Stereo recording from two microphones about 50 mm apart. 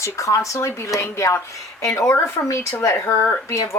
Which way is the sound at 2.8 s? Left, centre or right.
Left.